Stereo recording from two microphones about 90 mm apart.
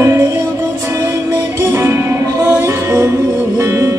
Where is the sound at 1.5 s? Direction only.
30° right (ahead or behind).